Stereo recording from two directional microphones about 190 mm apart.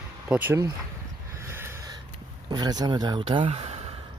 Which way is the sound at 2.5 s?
20° right (ahead or behind).